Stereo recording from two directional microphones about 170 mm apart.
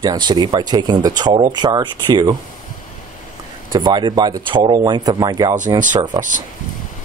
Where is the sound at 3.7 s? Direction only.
25° right (ahead or behind).